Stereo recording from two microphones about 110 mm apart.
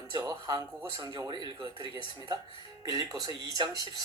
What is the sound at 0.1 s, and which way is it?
Speech, 35° right (ahead or behind).